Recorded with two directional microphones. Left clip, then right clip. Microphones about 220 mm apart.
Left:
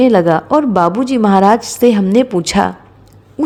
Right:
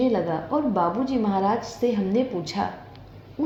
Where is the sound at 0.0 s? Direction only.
45° left (ahead or behind).